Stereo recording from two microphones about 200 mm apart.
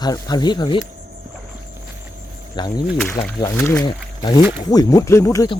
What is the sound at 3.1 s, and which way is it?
Speech, 10° left (ahead or behind).